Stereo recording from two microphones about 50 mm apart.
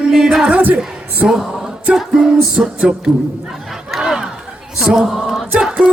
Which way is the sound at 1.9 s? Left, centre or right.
Centre.